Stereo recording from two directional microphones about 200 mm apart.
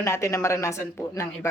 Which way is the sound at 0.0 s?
15° left (ahead or behind).